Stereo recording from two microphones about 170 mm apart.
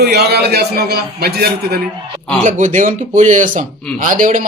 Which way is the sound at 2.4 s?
45° right (ahead or behind).